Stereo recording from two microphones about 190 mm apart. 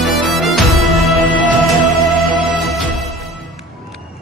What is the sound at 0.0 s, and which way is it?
Music, centre (ahead or behind).